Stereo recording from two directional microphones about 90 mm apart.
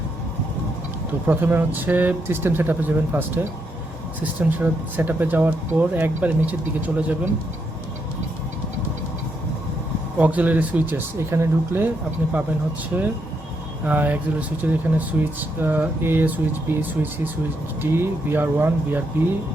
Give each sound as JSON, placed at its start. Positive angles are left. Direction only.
{"t": 1.3, "sound": "speech", "side_deg": -25}
{"t": 10.2, "sound": "speech", "side_deg": -15}
{"t": 12.9, "sound": "speech", "side_deg": -20}